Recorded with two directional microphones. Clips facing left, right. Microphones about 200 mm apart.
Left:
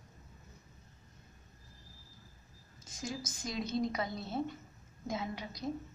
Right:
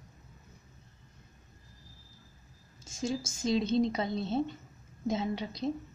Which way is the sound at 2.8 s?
25° right (ahead or behind).